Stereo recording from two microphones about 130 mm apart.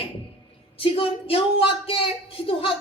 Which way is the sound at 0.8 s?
45° left (ahead or behind).